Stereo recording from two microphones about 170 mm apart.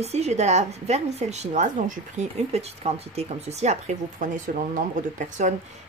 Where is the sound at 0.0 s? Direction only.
40° right (ahead or behind).